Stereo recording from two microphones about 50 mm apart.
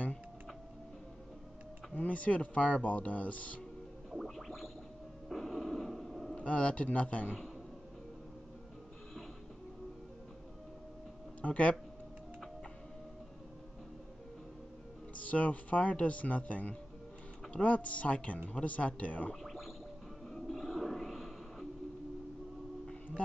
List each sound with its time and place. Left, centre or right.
2.0 s speech: left
4.1 s music: centre
5.3 s a sound: centre
6.3 s speech: left
11.4 s speech: left
15.1 s speech: left
19.4 s music: centre
20.2 s a sound: centre